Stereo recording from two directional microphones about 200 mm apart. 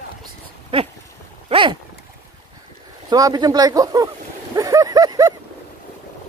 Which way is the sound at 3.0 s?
20° right (ahead or behind).